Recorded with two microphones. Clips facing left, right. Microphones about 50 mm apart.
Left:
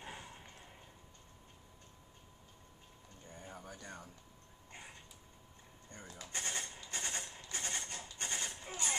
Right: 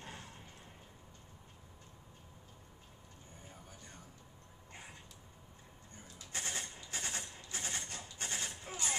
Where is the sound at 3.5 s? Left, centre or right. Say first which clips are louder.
Left 8 dB; left.